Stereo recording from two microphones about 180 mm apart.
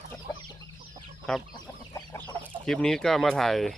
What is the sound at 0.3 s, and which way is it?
Chicken, 20° left (ahead or behind).